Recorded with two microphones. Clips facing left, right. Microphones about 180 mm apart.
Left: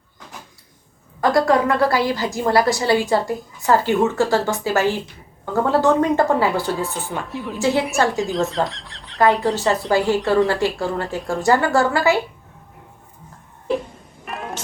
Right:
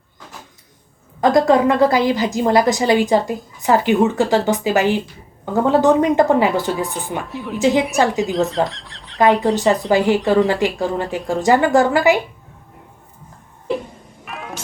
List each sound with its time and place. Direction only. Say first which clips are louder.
1.2 s a woman's voice: right 3 dB; 20° right (ahead or behind)
7.3 s speech: right 2 dB; centre (ahead or behind)
7.6 s a woman's voice: right 3 dB; 15° right (ahead or behind)
8.2 s speech: right 3 dB; centre (ahead or behind)
9.9 s a woman's voice: right 2 dB; 20° right (ahead or behind)
14.3 s vehicle: left 2 dB; centre (ahead or behind)